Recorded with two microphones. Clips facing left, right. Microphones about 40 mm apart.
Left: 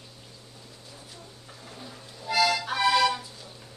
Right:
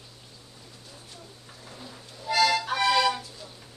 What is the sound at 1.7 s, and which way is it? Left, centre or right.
Accordion, centre.